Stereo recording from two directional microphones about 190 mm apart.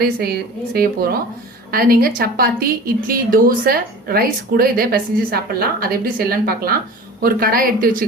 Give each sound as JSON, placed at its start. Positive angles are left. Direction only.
{"t": 0.0, "sound": "a woman's voice", "side_deg": -55}